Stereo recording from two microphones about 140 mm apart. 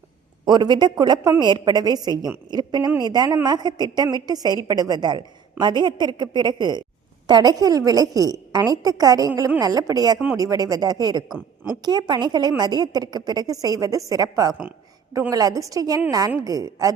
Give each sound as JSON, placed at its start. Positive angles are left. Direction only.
{"t": 0.4, "sound": "a man's voice", "side_deg": -30}